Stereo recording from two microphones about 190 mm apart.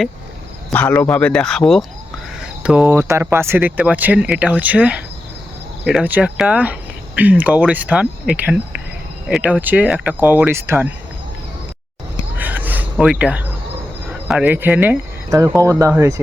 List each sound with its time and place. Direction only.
0.7 s speech: 10° left (ahead or behind); by 10.9 s 10° right (ahead or behind)
12.4 s a sound: 10° right (ahead or behind)
14.3 s speech: 5° right (ahead or behind)